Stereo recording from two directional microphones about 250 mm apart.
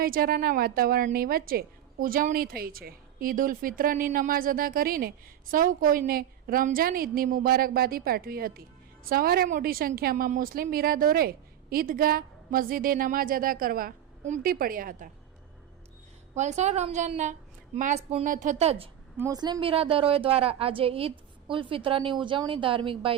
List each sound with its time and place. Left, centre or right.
0.0 s a woman's voice: right
16.3 s a woman's voice: right
19.1 s a woman's voice: centre